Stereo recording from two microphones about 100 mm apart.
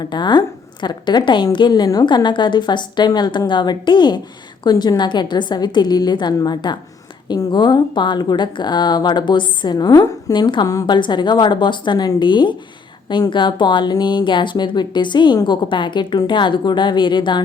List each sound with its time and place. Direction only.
0.0 s a woman's voice: 50° left (ahead or behind)
10.3 s a woman's voice: 50° left (ahead or behind)